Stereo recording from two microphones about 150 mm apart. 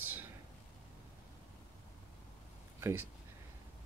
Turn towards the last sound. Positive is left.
turn(degrees=-20)  # may be behind; listen again after turning